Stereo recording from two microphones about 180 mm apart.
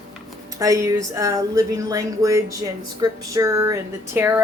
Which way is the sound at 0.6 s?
15° right (ahead or behind).